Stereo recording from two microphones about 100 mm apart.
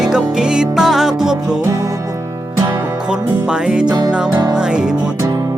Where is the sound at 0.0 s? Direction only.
5° right (ahead or behind).